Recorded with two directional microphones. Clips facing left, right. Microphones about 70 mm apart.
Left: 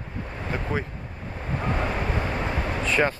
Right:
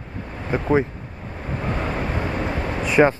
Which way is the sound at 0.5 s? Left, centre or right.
Centre.